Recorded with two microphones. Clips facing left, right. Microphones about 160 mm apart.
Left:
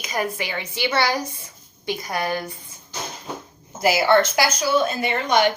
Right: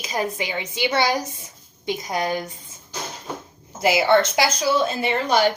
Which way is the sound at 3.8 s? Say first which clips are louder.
Even; 20° right (ahead or behind).